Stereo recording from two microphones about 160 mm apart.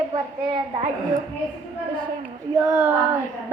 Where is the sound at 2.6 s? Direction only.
5° right (ahead or behind).